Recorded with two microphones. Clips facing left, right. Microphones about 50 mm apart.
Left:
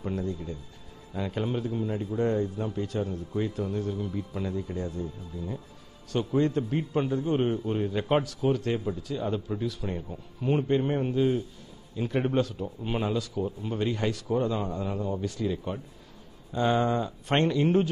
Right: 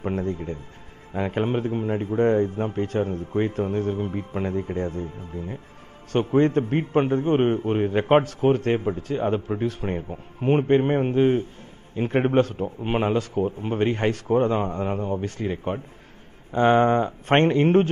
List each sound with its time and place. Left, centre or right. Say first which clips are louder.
0.0 s a man's voice: right 5 dB; right